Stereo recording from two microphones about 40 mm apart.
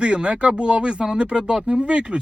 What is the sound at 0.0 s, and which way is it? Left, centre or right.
Speech, right.